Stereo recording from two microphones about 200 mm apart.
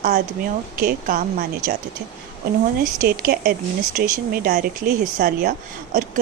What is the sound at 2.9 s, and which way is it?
Speech, 45° right (ahead or behind).